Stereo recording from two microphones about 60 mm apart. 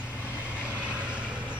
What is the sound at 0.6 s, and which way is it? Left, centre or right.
Vehicle, right.